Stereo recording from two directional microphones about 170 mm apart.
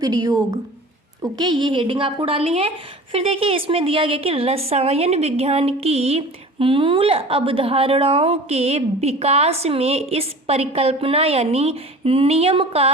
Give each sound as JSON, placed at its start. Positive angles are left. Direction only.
{"t": 0.0, "sound": "a woman's voice", "side_deg": -25}